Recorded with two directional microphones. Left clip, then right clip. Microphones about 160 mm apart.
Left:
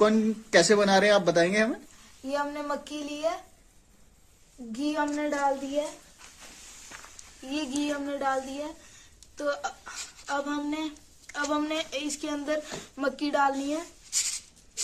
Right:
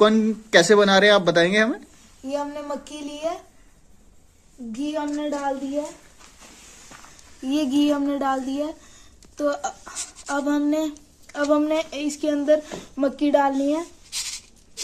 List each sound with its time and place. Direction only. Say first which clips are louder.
0.0 s speech: right 6 dB; centre (ahead or behind)
2.2 s speech: right 2 dB; 15° right (ahead or behind)
4.9 s speech: right 2 dB; 10° left (ahead or behind)
7.4 s a woman's voice: right 10 dB; 70° right (ahead or behind); by 13.8 s 45° right (ahead or behind)